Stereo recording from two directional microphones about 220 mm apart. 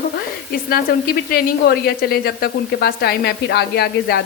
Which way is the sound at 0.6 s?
40° left (ahead or behind).